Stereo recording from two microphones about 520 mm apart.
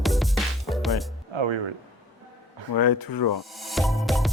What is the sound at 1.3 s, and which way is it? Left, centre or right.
Music, right.